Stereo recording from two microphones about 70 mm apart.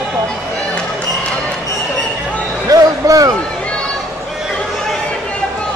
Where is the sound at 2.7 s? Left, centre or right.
Right.